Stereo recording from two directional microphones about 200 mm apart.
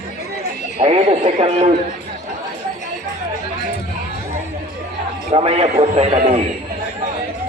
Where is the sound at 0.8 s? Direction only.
30° right (ahead or behind).